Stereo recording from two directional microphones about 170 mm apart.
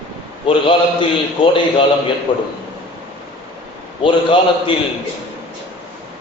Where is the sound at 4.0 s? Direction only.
30° left (ahead or behind).